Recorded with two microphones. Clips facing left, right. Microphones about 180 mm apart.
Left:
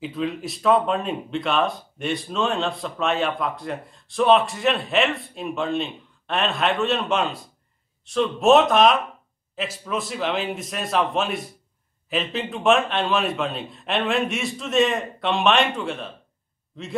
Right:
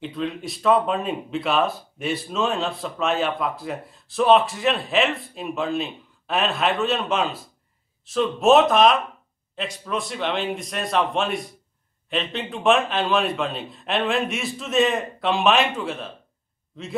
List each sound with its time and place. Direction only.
0.0 s a man's voice: centre (ahead or behind)